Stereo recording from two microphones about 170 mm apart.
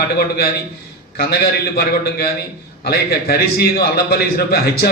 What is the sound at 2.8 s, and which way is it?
A man's voice, 70° left (ahead or behind).